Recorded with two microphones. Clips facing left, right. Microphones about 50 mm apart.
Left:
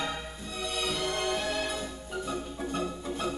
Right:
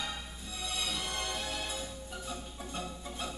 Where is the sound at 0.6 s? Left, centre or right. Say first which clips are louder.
Left 6 dB; left.